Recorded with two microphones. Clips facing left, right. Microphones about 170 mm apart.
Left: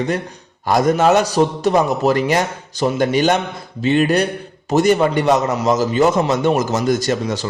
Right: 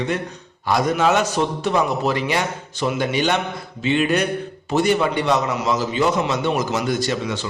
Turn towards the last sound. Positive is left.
turn(degrees=40)  # may be behind; listen again after turning